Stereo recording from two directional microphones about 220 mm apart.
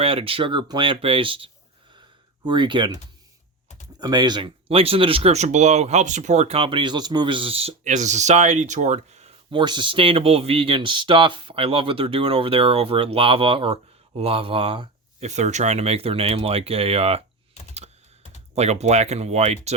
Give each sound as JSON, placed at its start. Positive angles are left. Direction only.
{"t": 0.0, "sound": "speech", "side_deg": -25}
{"t": 4.0, "sound": "speech", "side_deg": -20}
{"t": 18.5, "sound": "speech", "side_deg": -30}